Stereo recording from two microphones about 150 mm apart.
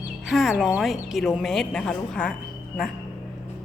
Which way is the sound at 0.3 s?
Centre (ahead or behind).